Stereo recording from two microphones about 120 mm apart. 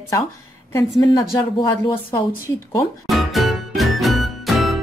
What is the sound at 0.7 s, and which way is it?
Speech, 25° left (ahead or behind).